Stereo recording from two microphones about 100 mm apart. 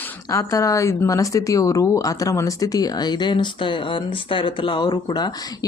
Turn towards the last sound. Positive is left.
turn(degrees=45)  # may be behind; listen again after turning